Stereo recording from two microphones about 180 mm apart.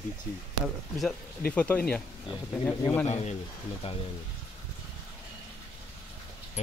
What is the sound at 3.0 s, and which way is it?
Speech, 35° left (ahead or behind).